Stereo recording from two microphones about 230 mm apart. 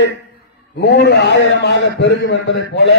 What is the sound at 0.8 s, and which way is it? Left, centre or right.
A man's voice, left.